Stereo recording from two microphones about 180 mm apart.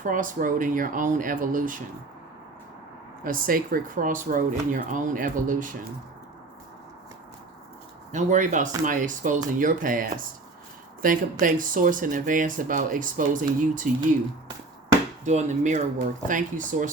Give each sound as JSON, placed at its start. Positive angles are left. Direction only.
{"t": 0.0, "sound": "speech", "side_deg": -45}
{"t": 3.2, "sound": "speech", "side_deg": -50}
{"t": 8.1, "sound": "speech", "side_deg": -45}
{"t": 15.2, "sound": "speech", "side_deg": -40}